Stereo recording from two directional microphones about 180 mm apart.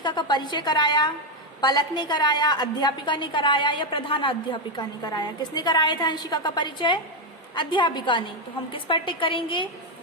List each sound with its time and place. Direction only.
0.0 s a woman's voice: 25° left (ahead or behind)